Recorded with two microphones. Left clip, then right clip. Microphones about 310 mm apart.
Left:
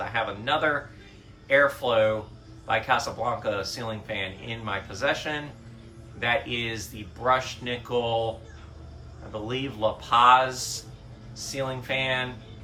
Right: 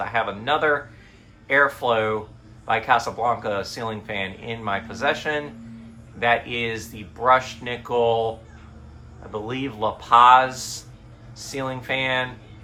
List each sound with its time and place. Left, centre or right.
0.0 s speech: centre
9.5 s speech: centre